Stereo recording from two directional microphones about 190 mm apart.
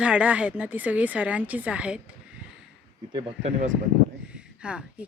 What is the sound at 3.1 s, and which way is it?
Speech, 25° right (ahead or behind).